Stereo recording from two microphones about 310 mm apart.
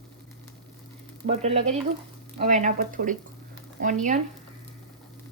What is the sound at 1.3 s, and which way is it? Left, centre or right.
Dishes, right.